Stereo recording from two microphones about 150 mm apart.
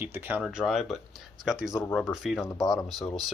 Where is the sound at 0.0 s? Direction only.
15° right (ahead or behind).